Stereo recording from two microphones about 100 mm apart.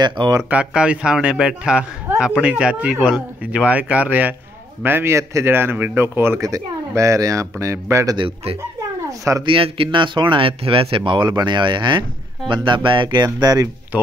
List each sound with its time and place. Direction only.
0.0 s speech: 45° right (ahead or behind)
0.5 s a man's voice: 10° right (ahead or behind)
6.4 s speech: 35° right (ahead or behind)
9.5 s speech: 60° right (ahead or behind); by 13.7 s 40° right (ahead or behind)